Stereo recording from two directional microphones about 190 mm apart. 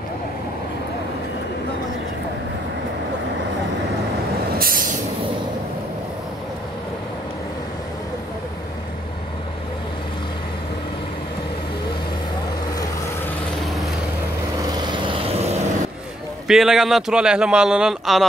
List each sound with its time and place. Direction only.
4.6 s vehicle: 50° right (ahead or behind)
14.9 s vehicle: 30° right (ahead or behind)
16.4 s a man's voice: centre (ahead or behind)